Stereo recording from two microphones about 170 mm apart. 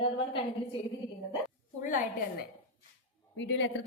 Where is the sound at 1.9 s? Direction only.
50° left (ahead or behind).